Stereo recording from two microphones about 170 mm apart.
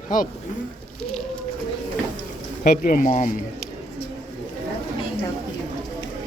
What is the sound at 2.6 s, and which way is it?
Speech, 50° left (ahead or behind).